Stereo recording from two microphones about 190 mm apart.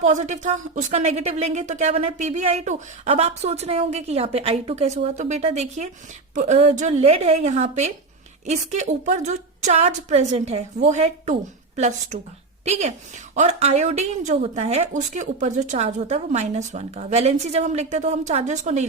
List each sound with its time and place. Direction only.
0.0 s speech: 40° right (ahead or behind)